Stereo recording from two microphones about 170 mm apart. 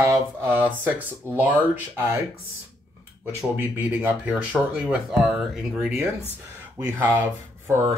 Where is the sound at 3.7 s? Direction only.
10° right (ahead or behind).